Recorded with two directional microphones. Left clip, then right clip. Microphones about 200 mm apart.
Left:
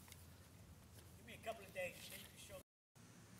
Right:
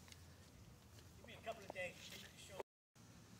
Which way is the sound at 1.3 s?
45° left (ahead or behind).